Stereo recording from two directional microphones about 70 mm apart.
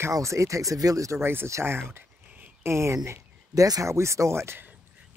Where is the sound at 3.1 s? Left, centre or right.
Right.